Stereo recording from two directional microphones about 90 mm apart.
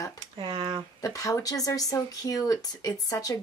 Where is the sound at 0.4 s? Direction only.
60° right (ahead or behind).